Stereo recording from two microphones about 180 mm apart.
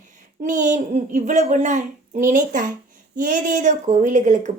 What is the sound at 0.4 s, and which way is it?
A child's voice, 45° right (ahead or behind).